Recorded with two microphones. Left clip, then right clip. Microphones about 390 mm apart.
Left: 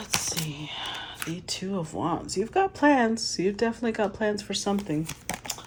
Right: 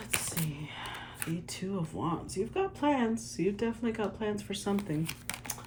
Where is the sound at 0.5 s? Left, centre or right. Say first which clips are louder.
Left 7 dB; centre.